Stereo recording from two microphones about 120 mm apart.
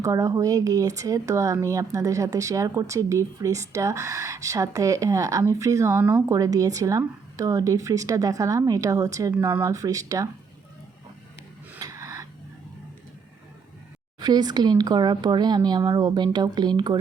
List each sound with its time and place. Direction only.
0.0 s speech: 30° right (ahead or behind)
9.3 s speech: 15° right (ahead or behind)
11.8 s a sound: 30° right (ahead or behind)
14.2 s speech: 35° right (ahead or behind)